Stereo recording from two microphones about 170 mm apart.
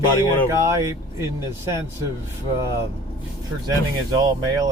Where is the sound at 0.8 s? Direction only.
15° right (ahead or behind).